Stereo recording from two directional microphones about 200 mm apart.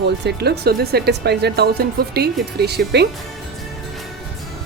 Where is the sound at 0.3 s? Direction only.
55° right (ahead or behind).